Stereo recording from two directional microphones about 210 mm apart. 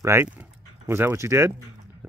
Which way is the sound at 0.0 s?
10° right (ahead or behind).